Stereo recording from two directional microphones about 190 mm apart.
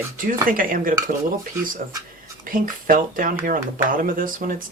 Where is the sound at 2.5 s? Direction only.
45° right (ahead or behind).